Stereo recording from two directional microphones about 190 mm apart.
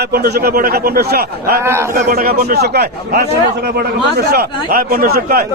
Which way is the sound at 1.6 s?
15° right (ahead or behind).